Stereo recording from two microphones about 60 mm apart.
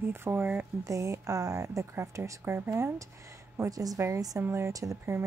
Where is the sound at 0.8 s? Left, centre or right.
Right.